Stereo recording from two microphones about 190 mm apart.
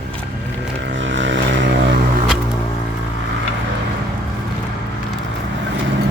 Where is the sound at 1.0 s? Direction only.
75° right (ahead or behind).